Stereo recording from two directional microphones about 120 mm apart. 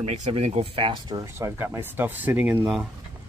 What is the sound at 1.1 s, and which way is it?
Speech, 25° right (ahead or behind).